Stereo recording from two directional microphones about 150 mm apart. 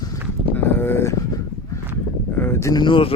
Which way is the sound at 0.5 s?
15° left (ahead or behind).